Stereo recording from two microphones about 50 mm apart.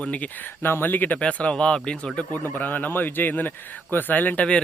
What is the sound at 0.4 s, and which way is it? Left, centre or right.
Speech, left.